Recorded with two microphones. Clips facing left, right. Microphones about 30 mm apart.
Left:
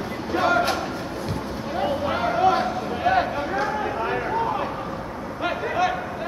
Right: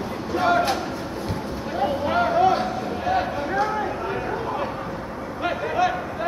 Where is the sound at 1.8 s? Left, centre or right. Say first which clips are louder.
Right 2 dB; centre.